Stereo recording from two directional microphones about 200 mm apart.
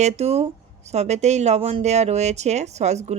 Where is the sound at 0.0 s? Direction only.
35° right (ahead or behind).